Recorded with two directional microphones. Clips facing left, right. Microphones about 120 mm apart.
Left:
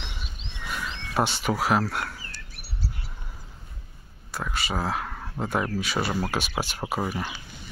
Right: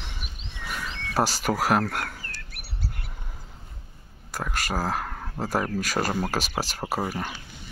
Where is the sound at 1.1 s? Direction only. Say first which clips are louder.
Right 1 dB; 40° right (ahead or behind); by 3.1 s 60° right (ahead or behind).